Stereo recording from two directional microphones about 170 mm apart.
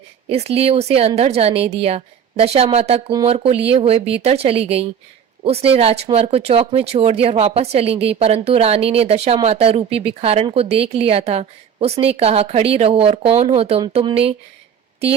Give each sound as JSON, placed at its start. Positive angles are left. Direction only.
{"t": 0.3, "sound": "speech", "side_deg": -35}